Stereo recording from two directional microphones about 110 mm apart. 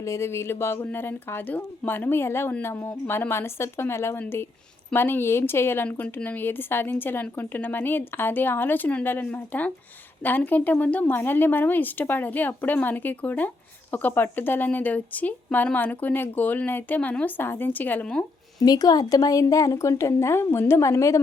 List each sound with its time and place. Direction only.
0.0 s speech: 25° left (ahead or behind)
18.6 s speech: 35° left (ahead or behind)